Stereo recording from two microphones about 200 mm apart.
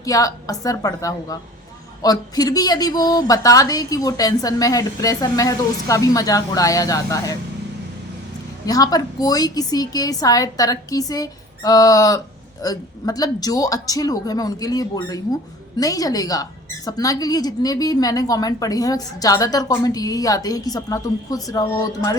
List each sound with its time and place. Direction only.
0.0 s a woman's voice: 15° left (ahead or behind)
8.6 s a woman's voice: 20° left (ahead or behind)